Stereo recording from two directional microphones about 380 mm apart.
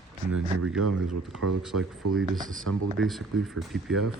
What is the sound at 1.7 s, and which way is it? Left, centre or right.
Speech, right.